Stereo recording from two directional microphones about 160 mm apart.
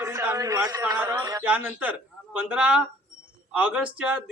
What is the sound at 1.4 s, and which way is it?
A man's voice, 10° right (ahead or behind).